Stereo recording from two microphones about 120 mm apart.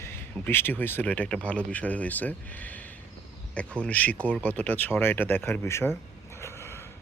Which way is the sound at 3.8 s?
10° left (ahead or behind).